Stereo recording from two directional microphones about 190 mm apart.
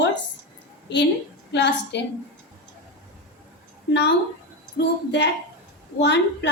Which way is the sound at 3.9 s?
60° left (ahead or behind).